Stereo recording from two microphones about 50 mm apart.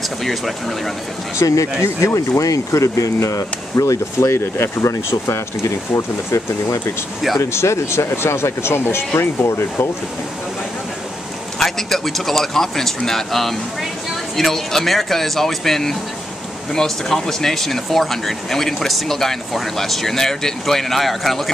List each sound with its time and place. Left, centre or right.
1.4 s speech: left
2.1 s speech: left
7.3 s speech: left
11.6 s speech: centre